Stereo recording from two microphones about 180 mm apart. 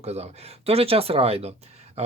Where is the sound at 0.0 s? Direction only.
35° right (ahead or behind).